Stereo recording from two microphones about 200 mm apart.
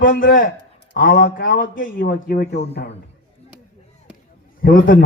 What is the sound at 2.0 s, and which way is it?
Speech, 45° left (ahead or behind).